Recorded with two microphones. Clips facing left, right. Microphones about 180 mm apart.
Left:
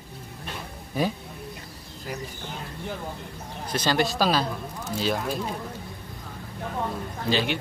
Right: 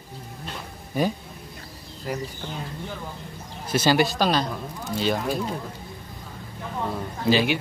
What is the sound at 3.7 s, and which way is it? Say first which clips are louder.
Speech: right 4 dB; 5° right (ahead or behind).